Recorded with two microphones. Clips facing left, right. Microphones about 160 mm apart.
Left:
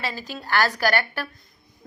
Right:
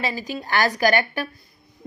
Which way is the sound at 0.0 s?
15° right (ahead or behind).